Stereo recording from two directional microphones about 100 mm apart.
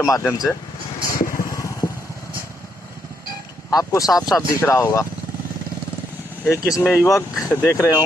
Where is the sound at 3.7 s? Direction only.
35° left (ahead or behind).